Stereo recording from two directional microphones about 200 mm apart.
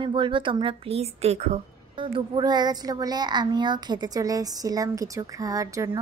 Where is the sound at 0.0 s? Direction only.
25° right (ahead or behind).